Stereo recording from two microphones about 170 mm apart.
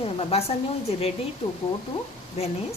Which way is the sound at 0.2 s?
35° left (ahead or behind).